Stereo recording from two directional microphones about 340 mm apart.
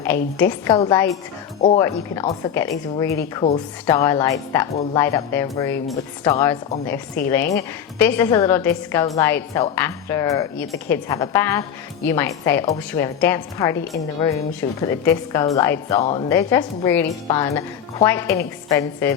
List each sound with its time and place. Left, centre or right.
0.3 s a woman's voice: centre
16.0 s a woman's voice: centre
16.3 s a woman's voice: centre